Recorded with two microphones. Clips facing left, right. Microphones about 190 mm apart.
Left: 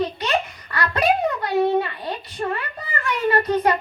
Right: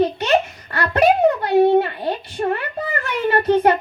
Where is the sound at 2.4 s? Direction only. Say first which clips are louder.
Right 5 dB; 40° right (ahead or behind).